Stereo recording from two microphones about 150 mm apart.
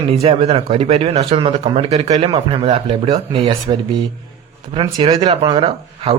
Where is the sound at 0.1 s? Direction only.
40° right (ahead or behind).